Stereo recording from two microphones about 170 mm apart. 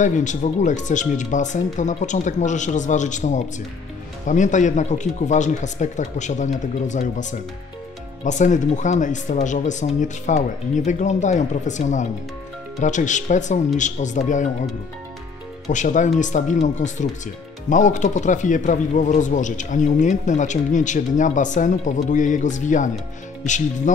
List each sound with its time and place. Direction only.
0.0 s speech: 45° left (ahead or behind)
15.7 s speech: 45° left (ahead or behind)